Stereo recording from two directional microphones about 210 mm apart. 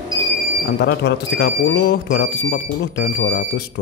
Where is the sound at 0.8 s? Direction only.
55° left (ahead or behind).